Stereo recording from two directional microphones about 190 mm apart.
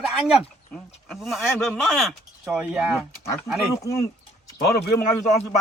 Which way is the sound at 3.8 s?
15° left (ahead or behind).